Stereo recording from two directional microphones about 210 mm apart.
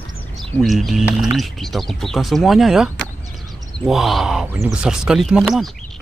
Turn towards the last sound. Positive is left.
turn(degrees=0)  # may be behind; listen again after turning